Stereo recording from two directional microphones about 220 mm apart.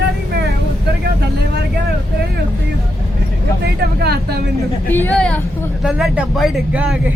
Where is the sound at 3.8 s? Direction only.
45° right (ahead or behind).